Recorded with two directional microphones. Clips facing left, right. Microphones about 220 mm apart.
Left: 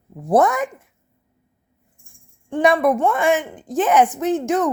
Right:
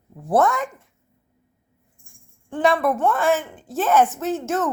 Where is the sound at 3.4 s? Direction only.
15° left (ahead or behind).